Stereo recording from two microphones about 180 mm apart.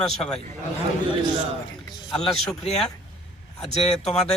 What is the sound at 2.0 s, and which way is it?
Speech, centre (ahead or behind).